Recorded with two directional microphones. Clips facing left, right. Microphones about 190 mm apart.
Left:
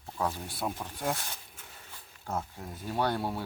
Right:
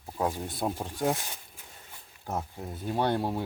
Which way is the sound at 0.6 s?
35° right (ahead or behind).